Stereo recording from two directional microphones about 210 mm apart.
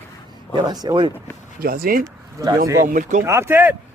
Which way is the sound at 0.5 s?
20° right (ahead or behind).